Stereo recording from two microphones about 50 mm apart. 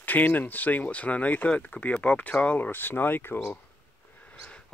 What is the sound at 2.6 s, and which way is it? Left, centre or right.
Speech, left.